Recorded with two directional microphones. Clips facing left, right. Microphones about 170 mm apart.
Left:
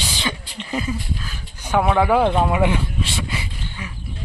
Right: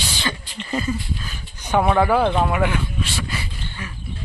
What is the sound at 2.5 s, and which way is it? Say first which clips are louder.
Speech: left 2 dB; 25° left (ahead or behind).